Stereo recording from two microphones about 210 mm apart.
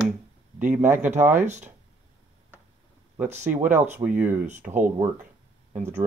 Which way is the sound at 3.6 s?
10° right (ahead or behind).